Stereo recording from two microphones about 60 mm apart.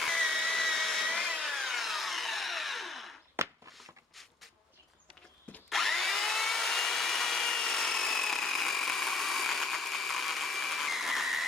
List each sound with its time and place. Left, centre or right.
0.0 s a sound: centre
1.2 s tools: centre
3.4 s walk: right
5.6 s wood: centre